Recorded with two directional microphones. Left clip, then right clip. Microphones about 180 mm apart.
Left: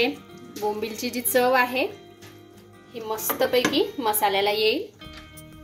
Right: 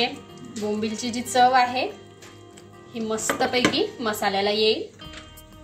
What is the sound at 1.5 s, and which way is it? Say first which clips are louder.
Speech: right 1 dB; 55° left (ahead or behind).